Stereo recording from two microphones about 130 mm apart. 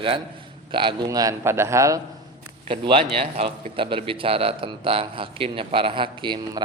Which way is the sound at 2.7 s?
45° right (ahead or behind).